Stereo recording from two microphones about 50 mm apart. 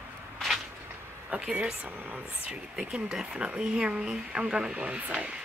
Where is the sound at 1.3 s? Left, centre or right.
Right.